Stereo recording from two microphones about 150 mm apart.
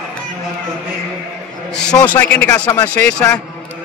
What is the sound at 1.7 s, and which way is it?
A man's voice, 5° left (ahead or behind).